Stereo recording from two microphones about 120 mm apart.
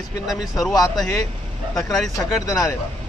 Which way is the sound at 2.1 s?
30° left (ahead or behind).